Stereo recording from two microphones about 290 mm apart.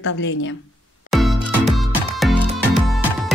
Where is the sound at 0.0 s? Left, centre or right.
Left.